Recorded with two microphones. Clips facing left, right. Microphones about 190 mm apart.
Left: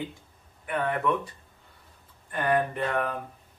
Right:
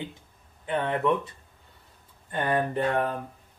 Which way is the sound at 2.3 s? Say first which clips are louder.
Even; 30° right (ahead or behind).